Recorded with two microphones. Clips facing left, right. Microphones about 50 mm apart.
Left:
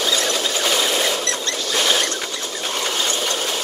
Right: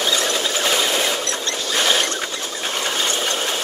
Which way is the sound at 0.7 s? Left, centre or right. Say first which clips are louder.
Even; centre.